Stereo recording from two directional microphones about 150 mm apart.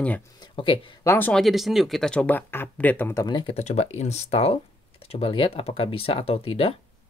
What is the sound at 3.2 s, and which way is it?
Speech, 30° left (ahead or behind).